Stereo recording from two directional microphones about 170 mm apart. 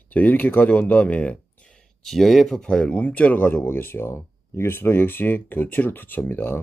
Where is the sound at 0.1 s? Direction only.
10° left (ahead or behind).